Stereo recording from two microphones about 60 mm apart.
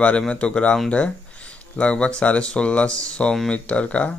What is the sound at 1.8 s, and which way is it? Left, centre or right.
Speech, centre.